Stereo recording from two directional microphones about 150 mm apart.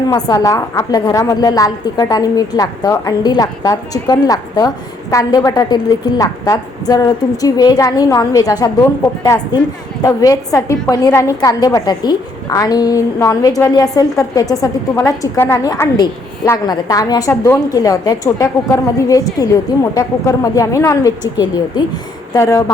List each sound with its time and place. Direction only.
0.1 s a woman's voice: 20° left (ahead or behind)